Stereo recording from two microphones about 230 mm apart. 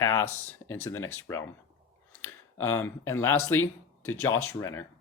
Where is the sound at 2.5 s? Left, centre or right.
Left.